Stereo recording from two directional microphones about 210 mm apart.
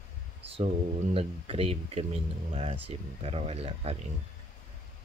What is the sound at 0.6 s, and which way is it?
Speech, 30° right (ahead or behind).